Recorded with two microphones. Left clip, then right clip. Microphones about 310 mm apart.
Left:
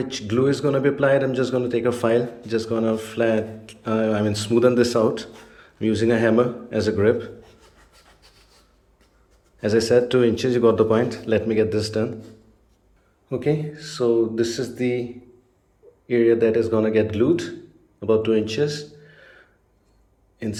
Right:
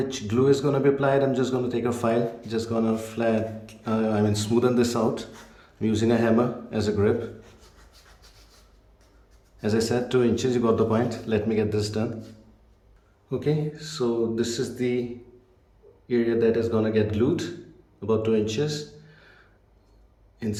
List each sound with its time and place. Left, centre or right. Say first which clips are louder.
0.0 s speech: left 2 dB; centre
9.6 s speech: left 7 dB; centre
13.3 s speech: left 3 dB; centre
16.0 s a man's voice: left 5 dB; centre
20.4 s speech: left 2 dB; centre